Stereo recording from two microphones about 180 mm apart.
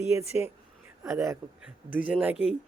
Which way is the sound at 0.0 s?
15° right (ahead or behind).